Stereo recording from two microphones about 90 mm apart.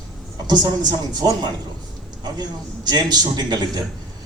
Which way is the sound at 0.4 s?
50° right (ahead or behind).